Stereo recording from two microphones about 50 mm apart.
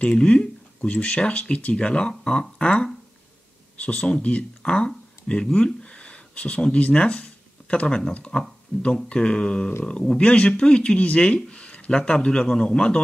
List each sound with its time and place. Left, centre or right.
0.1 s a man's voice: centre